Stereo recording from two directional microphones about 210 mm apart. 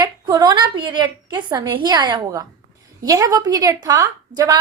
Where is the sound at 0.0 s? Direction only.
20° right (ahead or behind).